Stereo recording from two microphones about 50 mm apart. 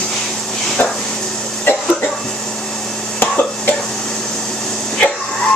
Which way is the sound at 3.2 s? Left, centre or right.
Left.